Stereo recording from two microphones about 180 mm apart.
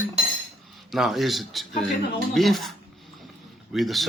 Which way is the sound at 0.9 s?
Centre (ahead or behind).